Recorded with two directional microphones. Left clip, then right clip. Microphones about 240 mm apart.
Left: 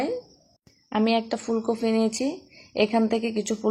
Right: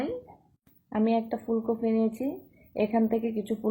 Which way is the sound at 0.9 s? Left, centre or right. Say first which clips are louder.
Left 4 dB; left.